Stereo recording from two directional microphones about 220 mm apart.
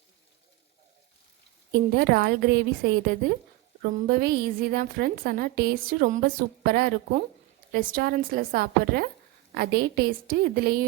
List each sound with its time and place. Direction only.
2.0 s a woman's voice: 45° right (ahead or behind)